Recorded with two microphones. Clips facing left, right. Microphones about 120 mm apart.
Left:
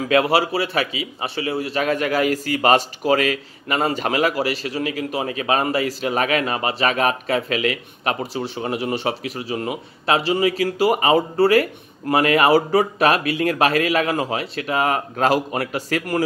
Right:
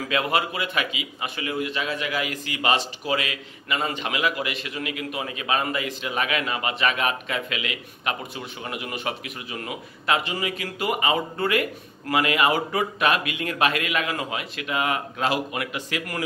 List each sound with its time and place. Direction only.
0.0 s a man's voice: 35° left (ahead or behind)